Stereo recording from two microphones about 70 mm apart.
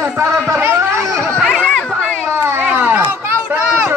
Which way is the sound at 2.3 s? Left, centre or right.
Right.